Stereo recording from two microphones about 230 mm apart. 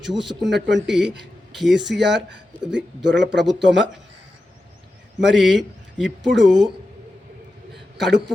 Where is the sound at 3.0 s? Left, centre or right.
Right.